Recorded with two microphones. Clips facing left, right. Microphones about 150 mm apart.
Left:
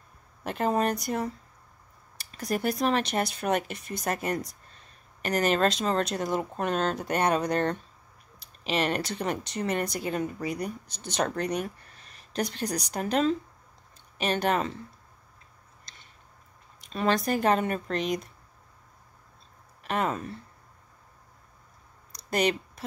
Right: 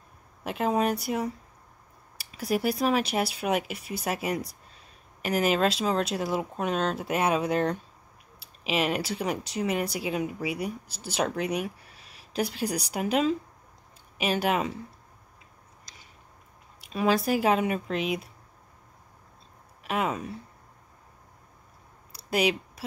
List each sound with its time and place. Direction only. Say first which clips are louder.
0.4 s speech: even; centre (ahead or behind)
16.8 s speech: right 1 dB; 5° right (ahead or behind)
19.8 s speech: even; 5° right (ahead or behind)
22.1 s a sound: even; 5° right (ahead or behind)